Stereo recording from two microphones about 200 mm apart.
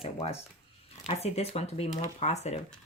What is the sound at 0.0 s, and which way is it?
Speech, 30° left (ahead or behind).